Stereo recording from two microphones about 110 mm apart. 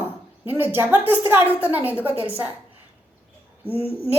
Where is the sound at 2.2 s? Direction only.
60° right (ahead or behind).